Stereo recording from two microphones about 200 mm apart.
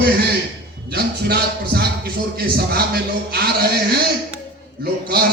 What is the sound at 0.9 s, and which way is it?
Music, 55° right (ahead or behind).